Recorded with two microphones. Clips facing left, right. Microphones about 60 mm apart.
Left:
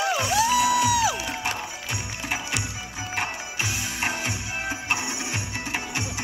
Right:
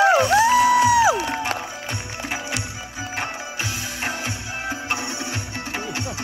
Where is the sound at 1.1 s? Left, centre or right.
Right.